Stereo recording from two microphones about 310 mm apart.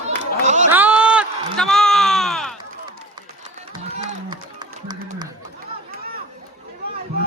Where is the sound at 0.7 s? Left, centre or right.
Centre.